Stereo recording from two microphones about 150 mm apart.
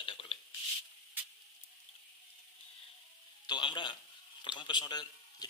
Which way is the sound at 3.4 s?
30° left (ahead or behind).